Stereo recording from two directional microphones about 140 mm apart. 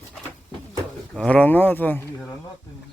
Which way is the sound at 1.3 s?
10° left (ahead or behind).